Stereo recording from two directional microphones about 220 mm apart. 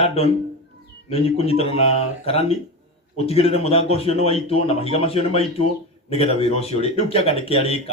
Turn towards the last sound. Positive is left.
turn(degrees=25)  # may be behind; listen again after turning